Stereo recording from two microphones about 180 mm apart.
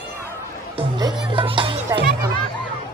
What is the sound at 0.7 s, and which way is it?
Music, 20° right (ahead or behind).